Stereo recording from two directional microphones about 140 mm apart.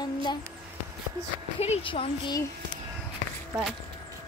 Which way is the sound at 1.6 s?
45° left (ahead or behind).